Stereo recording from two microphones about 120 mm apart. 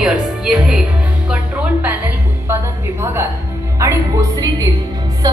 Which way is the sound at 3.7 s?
25° right (ahead or behind).